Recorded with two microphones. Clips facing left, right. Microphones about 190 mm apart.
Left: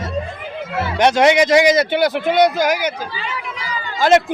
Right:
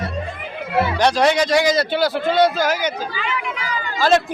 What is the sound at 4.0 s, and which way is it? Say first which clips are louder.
Speech: left 3 dB; 20° left (ahead or behind).